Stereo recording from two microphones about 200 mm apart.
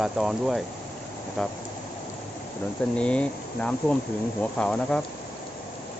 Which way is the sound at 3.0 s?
5° left (ahead or behind).